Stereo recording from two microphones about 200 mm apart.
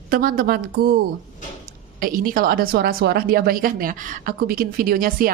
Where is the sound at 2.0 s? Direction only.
45° right (ahead or behind).